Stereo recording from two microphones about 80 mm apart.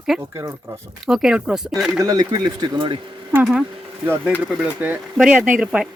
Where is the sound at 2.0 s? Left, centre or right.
Right.